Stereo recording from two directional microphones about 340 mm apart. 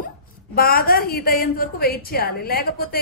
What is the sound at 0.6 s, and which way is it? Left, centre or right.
A woman's voice, left.